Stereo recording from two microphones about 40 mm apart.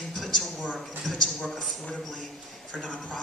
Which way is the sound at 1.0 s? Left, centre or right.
Centre.